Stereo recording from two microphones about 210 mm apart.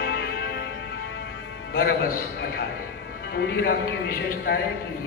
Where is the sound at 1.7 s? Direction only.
45° left (ahead or behind).